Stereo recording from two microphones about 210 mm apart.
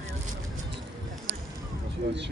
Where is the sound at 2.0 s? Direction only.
55° right (ahead or behind).